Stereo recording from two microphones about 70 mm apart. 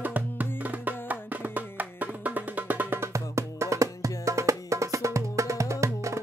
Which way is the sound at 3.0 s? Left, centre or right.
Right.